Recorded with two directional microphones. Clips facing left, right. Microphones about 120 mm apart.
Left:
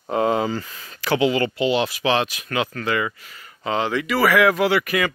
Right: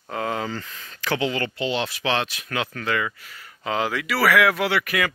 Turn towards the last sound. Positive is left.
turn(degrees=0)  # may be behind; listen again after turning